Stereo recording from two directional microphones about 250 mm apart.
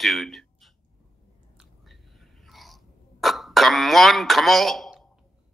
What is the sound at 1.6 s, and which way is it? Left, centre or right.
Cough, centre.